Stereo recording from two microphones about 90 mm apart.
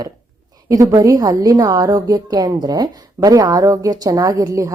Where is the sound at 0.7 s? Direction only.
40° right (ahead or behind).